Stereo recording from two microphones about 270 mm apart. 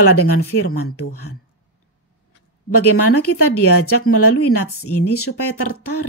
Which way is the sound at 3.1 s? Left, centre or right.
Left.